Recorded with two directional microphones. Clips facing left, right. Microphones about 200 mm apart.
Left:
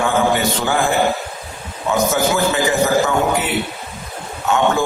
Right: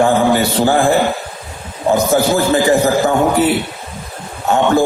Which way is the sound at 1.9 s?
35° right (ahead or behind).